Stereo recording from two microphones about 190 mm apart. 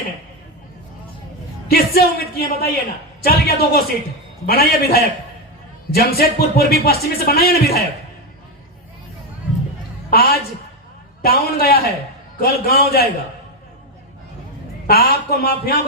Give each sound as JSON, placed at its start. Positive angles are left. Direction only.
{"t": 1.7, "sound": "speech", "side_deg": 55}
{"t": 10.1, "sound": "a woman's voice", "side_deg": 55}
{"t": 14.8, "sound": "speech", "side_deg": 55}